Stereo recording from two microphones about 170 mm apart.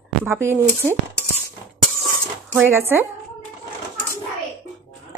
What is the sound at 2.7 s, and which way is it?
Speech, 10° right (ahead or behind).